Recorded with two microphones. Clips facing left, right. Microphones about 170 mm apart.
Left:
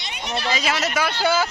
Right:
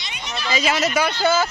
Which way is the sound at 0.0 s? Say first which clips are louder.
Left 3 dB; 60° left (ahead or behind).